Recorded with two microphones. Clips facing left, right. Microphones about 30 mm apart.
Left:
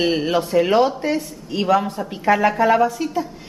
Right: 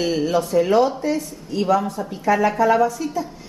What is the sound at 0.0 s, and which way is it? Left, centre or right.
A woman's voice, left.